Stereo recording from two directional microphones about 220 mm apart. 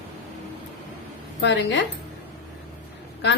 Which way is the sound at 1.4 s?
60° left (ahead or behind).